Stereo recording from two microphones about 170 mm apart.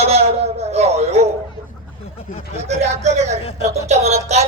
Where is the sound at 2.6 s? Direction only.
40° right (ahead or behind).